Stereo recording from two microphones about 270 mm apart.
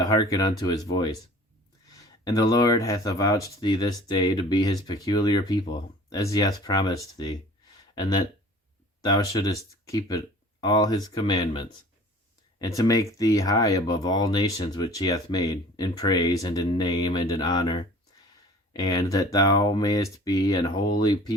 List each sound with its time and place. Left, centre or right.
0.0 s speech: centre
9.1 s speech: centre
10.6 s speech: centre